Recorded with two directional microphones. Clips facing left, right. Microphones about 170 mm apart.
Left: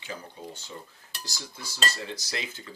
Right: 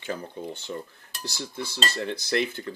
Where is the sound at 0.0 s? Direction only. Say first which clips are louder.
Right 6 dB; 55° right (ahead or behind).